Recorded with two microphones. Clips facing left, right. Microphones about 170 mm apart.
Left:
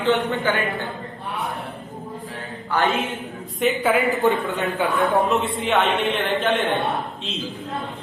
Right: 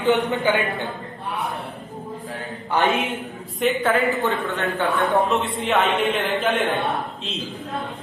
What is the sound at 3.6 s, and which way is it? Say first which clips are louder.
A woman's voice: even; 10° left (ahead or behind).